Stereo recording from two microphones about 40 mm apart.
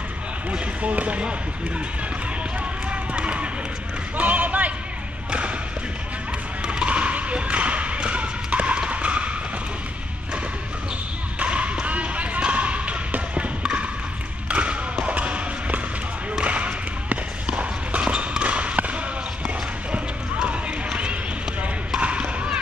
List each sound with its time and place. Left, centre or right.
0.5 s speech: right
2.6 s run: right
4.2 s speech: right
5.3 s a sound: right
6.6 s basketball bounce: right
11.3 s basketball bounce: right
14.5 s thump: right
16.4 s a sound: right
20.4 s run: right
22.0 s basketball bounce: right